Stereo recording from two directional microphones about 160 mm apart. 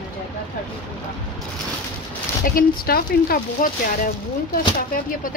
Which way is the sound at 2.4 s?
65° left (ahead or behind).